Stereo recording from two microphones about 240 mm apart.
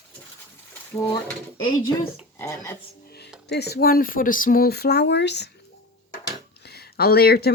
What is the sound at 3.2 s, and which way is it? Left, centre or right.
Speech, left.